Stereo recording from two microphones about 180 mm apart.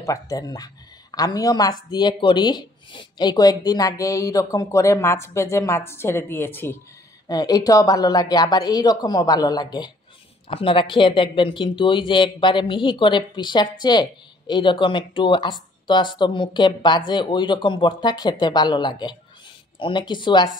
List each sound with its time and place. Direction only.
0.0 s speech: 20° left (ahead or behind)